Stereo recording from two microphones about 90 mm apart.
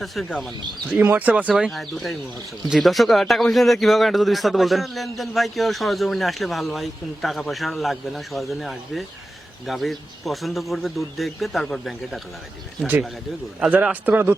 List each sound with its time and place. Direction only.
0.0 s a man's voice: centre (ahead or behind)
1.0 s speech: 20° right (ahead or behind)
1.5 s a man's voice: centre (ahead or behind)
13.6 s speech: 15° right (ahead or behind)